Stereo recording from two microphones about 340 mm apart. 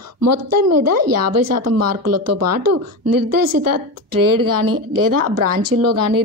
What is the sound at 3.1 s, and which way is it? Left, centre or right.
Speech, right.